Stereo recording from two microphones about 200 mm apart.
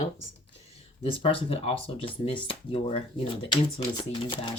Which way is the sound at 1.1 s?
25° left (ahead or behind).